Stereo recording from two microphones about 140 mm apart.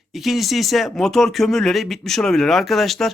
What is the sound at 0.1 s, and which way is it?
Speech, centre (ahead or behind).